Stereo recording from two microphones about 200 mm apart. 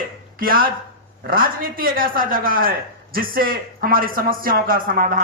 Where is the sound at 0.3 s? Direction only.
45° right (ahead or behind).